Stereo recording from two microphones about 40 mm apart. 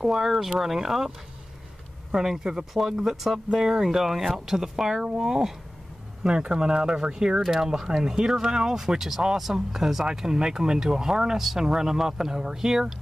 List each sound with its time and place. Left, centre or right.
0.0 s speech: centre
2.1 s speech: centre